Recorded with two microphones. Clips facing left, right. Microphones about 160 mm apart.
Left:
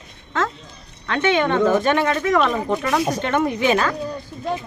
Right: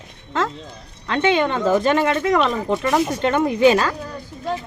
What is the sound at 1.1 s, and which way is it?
Speech, 25° right (ahead or behind).